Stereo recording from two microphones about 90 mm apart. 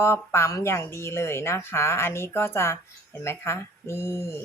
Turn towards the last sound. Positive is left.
turn(degrees=30)  # may be behind; listen again after turning